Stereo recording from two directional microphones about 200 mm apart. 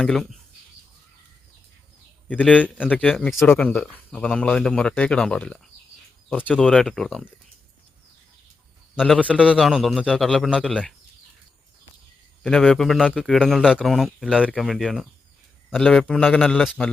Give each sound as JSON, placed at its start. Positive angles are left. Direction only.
{"t": 0.0, "sound": "a man's voice", "side_deg": 0}
{"t": 2.2, "sound": "a man's voice", "side_deg": 5}
{"t": 9.0, "sound": "a man's voice", "side_deg": 5}
{"t": 12.4, "sound": "a man's voice", "side_deg": 5}